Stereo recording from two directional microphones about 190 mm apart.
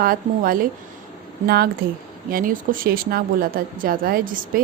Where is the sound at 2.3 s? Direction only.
50° right (ahead or behind).